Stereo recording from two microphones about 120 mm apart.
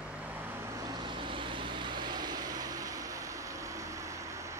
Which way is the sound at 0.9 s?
40° right (ahead or behind).